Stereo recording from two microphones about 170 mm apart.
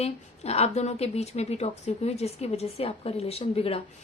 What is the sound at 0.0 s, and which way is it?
A woman's voice, 40° left (ahead or behind).